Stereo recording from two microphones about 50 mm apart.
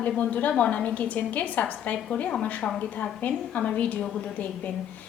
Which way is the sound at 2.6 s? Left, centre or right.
Centre.